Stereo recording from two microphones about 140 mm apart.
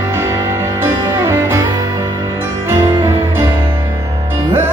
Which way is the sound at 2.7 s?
20° right (ahead or behind).